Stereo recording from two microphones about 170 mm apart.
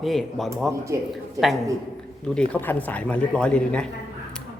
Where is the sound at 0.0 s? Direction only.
Centre (ahead or behind).